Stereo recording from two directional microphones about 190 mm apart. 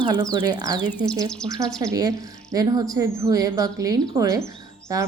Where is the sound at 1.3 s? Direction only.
5° left (ahead or behind).